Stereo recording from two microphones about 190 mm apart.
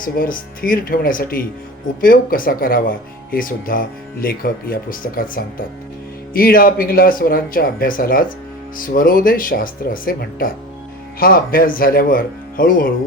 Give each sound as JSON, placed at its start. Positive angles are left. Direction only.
{"t": 0.0, "sound": "speech", "side_deg": 45}